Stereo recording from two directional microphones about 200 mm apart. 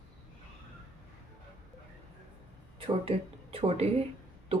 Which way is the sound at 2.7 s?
25° right (ahead or behind).